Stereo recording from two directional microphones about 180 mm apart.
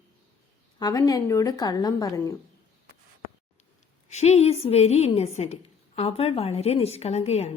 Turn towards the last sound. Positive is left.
turn(degrees=35)  # may be behind; listen again after turning